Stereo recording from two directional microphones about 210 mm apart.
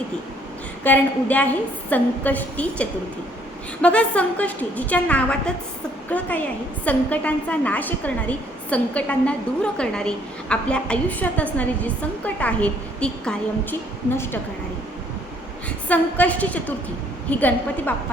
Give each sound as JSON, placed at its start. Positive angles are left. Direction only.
{"t": 0.9, "sound": "a woman's voice", "side_deg": 10}
{"t": 15.9, "sound": "a woman's voice", "side_deg": 5}